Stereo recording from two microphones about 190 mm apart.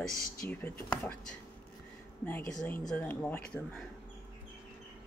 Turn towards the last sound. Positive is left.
turn(degrees=5)  # may be behind; listen again after turning